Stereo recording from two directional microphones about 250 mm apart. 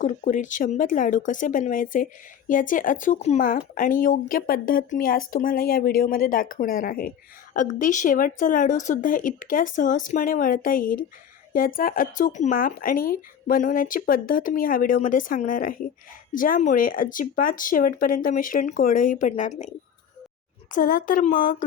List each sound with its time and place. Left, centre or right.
0.0 s speech: left